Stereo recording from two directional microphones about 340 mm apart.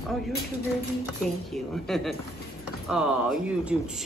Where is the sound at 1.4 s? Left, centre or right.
Centre.